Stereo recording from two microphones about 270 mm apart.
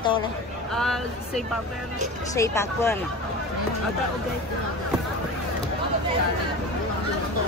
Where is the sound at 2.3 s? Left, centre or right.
Centre.